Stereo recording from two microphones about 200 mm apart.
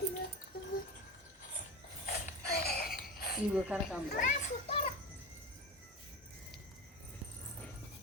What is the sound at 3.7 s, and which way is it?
Speech, 5° right (ahead or behind).